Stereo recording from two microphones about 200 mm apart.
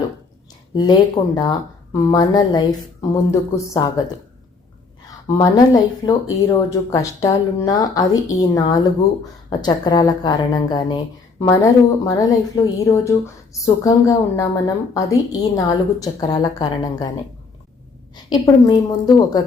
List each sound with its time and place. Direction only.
0.7 s a woman's voice: 20° left (ahead or behind)
5.4 s a woman's voice: 20° left (ahead or behind)
18.3 s a woman's voice: 20° left (ahead or behind)